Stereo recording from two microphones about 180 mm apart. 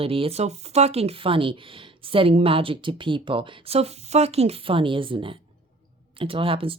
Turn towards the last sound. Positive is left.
turn(degrees=-30)  # may be behind; listen again after turning